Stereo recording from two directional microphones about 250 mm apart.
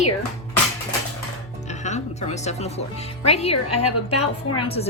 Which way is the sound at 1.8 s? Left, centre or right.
Left.